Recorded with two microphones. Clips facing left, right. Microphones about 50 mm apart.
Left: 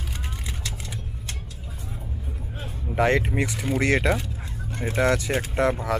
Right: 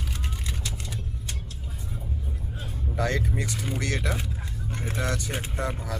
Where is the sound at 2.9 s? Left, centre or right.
Left.